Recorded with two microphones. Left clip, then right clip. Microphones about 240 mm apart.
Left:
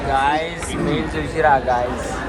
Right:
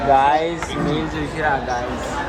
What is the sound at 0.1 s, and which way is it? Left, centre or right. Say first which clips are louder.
Speech: right 3 dB; right.